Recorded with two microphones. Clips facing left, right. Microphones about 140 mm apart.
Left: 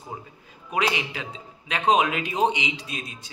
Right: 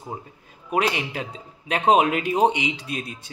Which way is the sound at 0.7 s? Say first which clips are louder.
Right 2 dB; 50° right (ahead or behind).